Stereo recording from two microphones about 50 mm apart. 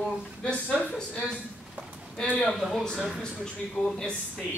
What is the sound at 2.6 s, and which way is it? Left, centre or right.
Speech, centre.